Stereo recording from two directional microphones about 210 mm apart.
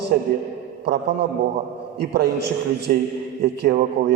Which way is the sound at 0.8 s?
50° right (ahead or behind).